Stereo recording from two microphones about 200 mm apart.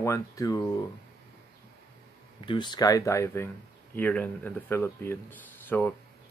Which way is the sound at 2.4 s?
25° left (ahead or behind).